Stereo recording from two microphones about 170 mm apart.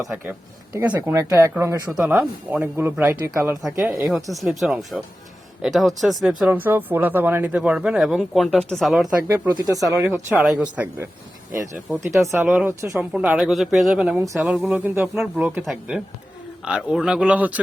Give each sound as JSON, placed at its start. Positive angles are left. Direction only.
{"t": 0.7, "sound": "speech", "side_deg": -20}
{"t": 2.0, "sound": "speech", "side_deg": -5}
{"t": 4.1, "sound": "speech", "side_deg": 0}
{"t": 9.6, "sound": "speech", "side_deg": -20}